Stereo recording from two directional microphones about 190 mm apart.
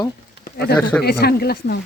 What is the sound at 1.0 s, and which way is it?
Speech, 55° left (ahead or behind).